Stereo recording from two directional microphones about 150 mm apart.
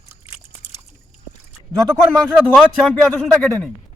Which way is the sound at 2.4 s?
10° right (ahead or behind).